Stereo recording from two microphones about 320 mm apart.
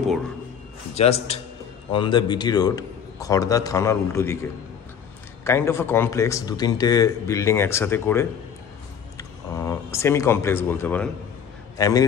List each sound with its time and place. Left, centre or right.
0.9 s a man's voice: centre